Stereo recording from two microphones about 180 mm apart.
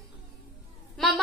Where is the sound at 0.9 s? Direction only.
Centre (ahead or behind).